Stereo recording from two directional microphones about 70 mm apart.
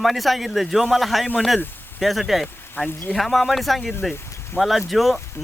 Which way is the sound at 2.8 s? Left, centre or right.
Left.